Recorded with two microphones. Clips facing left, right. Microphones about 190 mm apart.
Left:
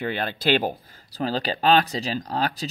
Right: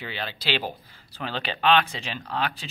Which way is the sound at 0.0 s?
50° left (ahead or behind).